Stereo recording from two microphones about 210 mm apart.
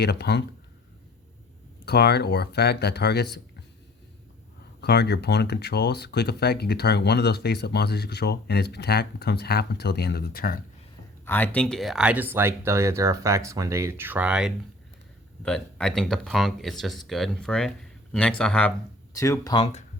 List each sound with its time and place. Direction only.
0.0 s speech: 55° left (ahead or behind)
1.8 s speech: 50° left (ahead or behind)
4.8 s speech: 50° left (ahead or behind)
11.3 s speech: 10° left (ahead or behind)
19.5 s speech: 30° left (ahead or behind)